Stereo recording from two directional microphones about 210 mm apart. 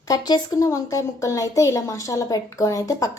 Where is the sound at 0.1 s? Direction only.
20° left (ahead or behind).